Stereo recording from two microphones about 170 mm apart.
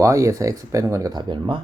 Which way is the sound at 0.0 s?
20° right (ahead or behind).